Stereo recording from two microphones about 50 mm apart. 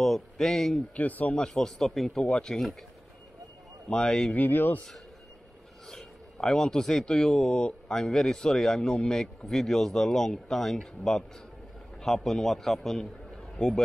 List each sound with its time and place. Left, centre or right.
0.0 s speech: centre
0.9 s speech: left
1.3 s speech: centre
3.9 s speech: centre
4.3 s speech: left
6.3 s a man's voice: centre